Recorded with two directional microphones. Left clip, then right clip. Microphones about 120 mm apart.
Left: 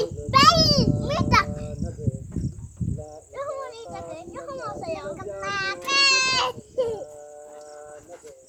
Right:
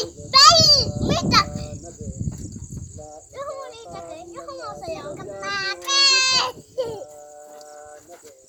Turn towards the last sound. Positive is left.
turn(degrees=-15)  # may be behind; listen again after turning